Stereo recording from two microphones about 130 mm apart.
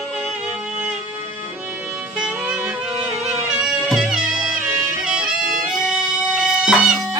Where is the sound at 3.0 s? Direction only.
5° right (ahead or behind).